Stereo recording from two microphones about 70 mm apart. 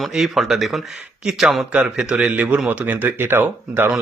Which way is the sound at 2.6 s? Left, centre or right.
Right.